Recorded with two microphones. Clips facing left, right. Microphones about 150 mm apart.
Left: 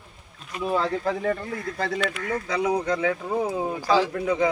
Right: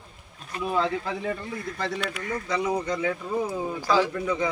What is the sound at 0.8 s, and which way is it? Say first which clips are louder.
Speech: even; 45° left (ahead or behind).